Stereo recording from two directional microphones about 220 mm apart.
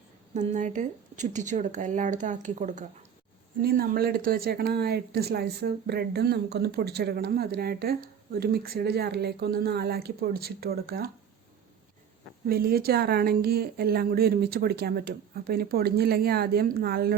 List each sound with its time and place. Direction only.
0.3 s speech: 35° right (ahead or behind)
12.5 s speech: 45° right (ahead or behind)